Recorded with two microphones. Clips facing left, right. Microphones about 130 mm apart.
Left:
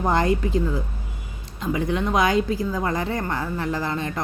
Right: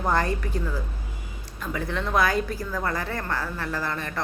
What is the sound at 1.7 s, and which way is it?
A woman's voice, 20° left (ahead or behind).